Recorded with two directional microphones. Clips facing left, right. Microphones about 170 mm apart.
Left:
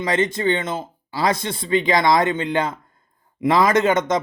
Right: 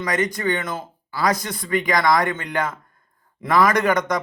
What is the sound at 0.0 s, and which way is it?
Speech, 25° left (ahead or behind).